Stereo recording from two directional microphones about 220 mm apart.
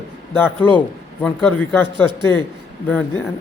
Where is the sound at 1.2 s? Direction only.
5° left (ahead or behind).